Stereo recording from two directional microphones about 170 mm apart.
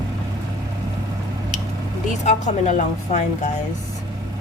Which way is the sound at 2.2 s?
40° left (ahead or behind).